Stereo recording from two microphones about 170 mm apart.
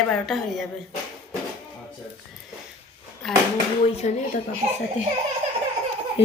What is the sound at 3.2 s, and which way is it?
Speech, centre (ahead or behind).